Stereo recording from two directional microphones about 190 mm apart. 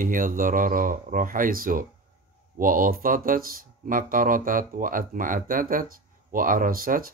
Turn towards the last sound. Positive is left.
turn(degrees=-50)  # may be behind; listen again after turning